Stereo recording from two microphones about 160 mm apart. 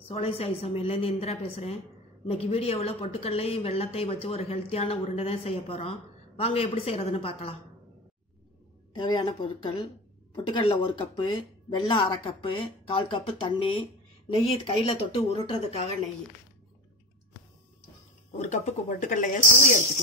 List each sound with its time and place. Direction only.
0.1 s speech: 40° left (ahead or behind)
8.9 s speech: 30° left (ahead or behind)
18.5 s speech: 50° left (ahead or behind)